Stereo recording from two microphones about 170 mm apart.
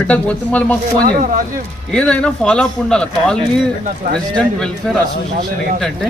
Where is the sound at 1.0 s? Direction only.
55° right (ahead or behind).